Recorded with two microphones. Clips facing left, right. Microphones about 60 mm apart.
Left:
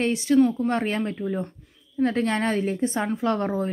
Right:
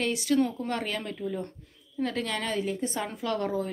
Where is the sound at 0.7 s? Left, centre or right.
Left.